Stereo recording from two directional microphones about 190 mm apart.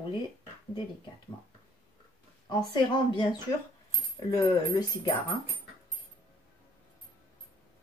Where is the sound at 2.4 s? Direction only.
25° left (ahead or behind).